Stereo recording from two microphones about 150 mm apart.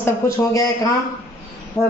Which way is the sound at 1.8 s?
20° left (ahead or behind).